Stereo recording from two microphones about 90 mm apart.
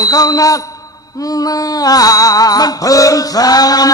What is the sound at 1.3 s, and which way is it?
Music, 45° left (ahead or behind).